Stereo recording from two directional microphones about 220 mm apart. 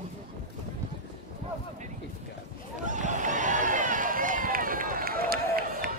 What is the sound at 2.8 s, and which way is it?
Run, 35° right (ahead or behind).